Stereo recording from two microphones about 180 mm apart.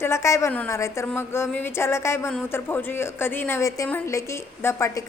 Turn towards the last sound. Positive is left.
turn(degrees=15)  # may be behind; listen again after turning